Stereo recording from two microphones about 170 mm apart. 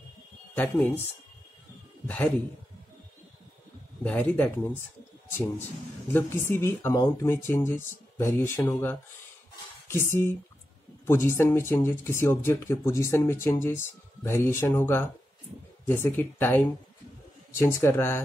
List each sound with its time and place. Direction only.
0.6 s speech: 10° left (ahead or behind)
2.0 s speech: 10° left (ahead or behind)
4.0 s speech: 10° left (ahead or behind)
6.1 s speech: 15° left (ahead or behind)